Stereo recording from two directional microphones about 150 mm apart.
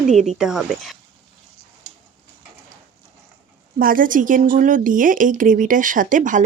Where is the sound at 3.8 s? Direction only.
70° right (ahead or behind).